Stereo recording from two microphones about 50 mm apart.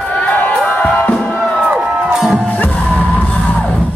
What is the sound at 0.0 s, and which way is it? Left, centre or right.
Music, left.